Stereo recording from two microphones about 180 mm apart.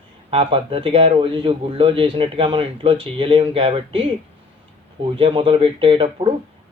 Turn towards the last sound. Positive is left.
turn(degrees=-30)  # may be behind; listen again after turning